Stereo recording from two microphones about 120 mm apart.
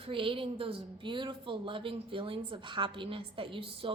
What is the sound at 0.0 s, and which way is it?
A woman's voice, 45° right (ahead or behind).